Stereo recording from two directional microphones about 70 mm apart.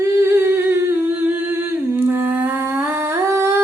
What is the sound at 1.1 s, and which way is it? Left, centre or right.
Humming, right.